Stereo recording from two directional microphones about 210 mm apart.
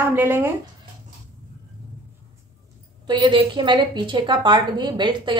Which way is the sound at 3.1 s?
20° right (ahead or behind).